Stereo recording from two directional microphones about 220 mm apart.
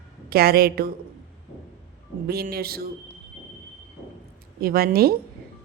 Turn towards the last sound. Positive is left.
turn(degrees=-45)  # may be behind; listen again after turning